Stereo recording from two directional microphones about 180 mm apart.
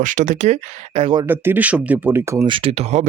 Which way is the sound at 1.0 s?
30° right (ahead or behind).